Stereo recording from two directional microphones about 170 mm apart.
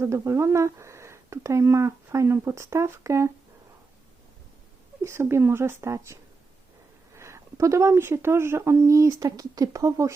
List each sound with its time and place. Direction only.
0.0 s speech: 15° right (ahead or behind)
5.0 s speech: 15° right (ahead or behind)
7.2 s speech: 15° right (ahead or behind)